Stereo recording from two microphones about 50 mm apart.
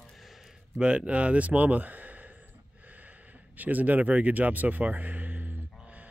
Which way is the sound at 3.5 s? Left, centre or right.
Right.